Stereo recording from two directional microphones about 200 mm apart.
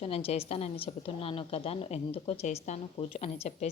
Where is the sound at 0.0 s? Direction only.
30° left (ahead or behind).